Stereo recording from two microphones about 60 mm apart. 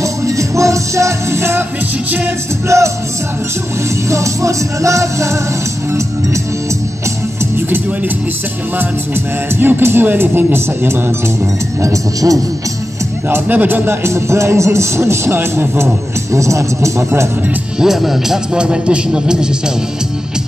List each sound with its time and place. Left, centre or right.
0.0 s music: right
2.7 s music: right
4.1 s music: right
9.6 s speech: right
11.8 s speech: right
13.3 s speech: right
16.3 s music: right
17.7 s speech: centre